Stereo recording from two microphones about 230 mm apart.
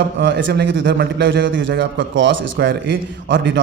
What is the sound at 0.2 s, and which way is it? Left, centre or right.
A man's voice, right.